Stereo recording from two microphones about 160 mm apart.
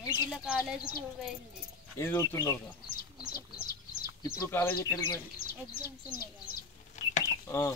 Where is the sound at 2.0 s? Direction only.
20° left (ahead or behind).